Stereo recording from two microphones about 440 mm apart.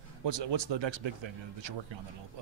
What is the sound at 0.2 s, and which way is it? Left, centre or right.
Speech, right.